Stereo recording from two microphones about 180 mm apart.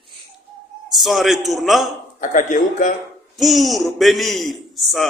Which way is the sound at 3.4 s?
Centre (ahead or behind).